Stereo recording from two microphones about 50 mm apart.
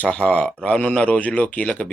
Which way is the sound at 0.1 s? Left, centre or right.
Centre.